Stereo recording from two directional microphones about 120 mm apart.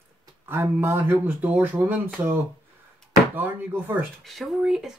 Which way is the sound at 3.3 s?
15° right (ahead or behind).